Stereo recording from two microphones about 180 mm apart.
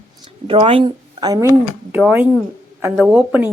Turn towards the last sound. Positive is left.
turn(degrees=-10)  # may be behind; listen again after turning